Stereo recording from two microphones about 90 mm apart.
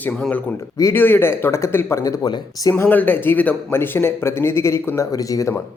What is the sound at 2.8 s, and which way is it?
Speech, 20° left (ahead or behind).